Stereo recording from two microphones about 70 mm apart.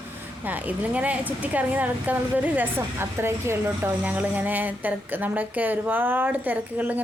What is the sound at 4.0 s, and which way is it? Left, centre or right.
Speech, right.